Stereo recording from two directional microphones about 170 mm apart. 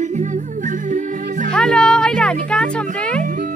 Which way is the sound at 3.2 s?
50° right (ahead or behind).